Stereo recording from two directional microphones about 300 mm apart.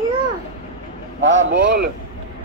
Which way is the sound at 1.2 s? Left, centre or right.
Right.